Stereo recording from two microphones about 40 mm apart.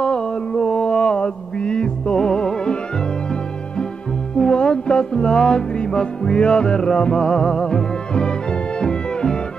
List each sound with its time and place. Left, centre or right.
0.0 s music: left
4.4 s music: left